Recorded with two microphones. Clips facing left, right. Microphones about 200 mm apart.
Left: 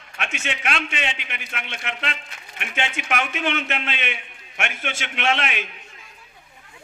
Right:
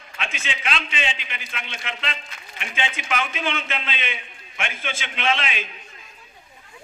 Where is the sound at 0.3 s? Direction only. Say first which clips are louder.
Left 2 dB; 65° left (ahead or behind).